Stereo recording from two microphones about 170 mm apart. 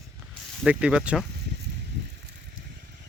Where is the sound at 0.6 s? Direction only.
5° right (ahead or behind).